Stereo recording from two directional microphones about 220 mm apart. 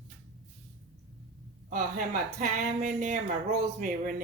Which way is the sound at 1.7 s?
35° right (ahead or behind).